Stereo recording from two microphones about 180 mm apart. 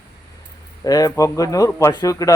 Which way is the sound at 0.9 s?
20° left (ahead or behind).